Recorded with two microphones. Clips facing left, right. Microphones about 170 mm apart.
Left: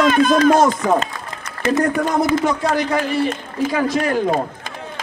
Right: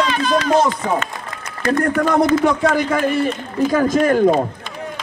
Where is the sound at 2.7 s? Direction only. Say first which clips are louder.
Right 1 dB; 50° right (ahead or behind).